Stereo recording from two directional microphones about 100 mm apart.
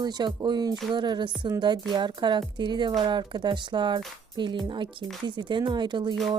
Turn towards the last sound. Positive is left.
turn(degrees=-50)  # may be behind; listen again after turning